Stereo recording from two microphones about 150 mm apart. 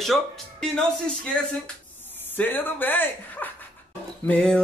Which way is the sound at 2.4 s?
10° left (ahead or behind).